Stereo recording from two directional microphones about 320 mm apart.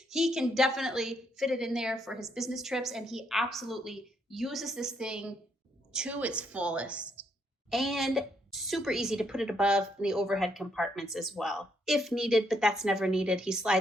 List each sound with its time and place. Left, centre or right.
0.1 s a woman's voice: centre